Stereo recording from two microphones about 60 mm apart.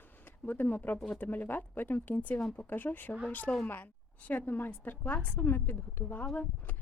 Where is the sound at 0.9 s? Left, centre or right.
Centre.